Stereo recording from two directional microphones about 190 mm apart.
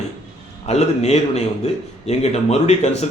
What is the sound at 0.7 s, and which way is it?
A man's voice, 35° left (ahead or behind).